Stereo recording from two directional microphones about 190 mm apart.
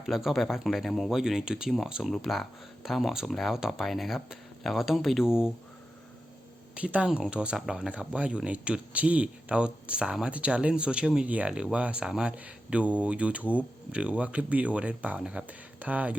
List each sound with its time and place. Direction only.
0.0 s speech: centre (ahead or behind)
6.7 s speech: 5° right (ahead or behind)